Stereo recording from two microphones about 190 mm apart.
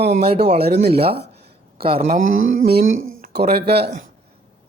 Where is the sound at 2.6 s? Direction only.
50° right (ahead or behind).